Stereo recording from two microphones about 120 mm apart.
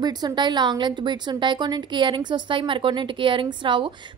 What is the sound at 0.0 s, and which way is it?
A woman's voice, 35° right (ahead or behind).